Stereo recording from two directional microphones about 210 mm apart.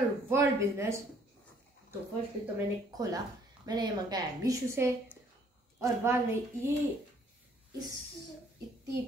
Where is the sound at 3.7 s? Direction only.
20° right (ahead or behind).